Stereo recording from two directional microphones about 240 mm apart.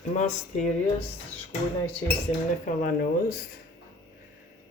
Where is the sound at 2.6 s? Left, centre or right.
Left.